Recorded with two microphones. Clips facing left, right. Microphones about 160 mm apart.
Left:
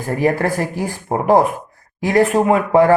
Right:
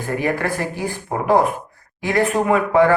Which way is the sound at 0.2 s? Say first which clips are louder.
Left 6 dB; 35° left (ahead or behind).